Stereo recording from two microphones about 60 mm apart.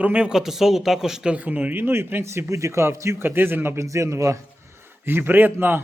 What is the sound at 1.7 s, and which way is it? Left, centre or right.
Speech, right.